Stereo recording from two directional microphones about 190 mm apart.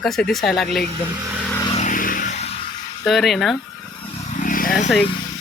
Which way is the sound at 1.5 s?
20° left (ahead or behind).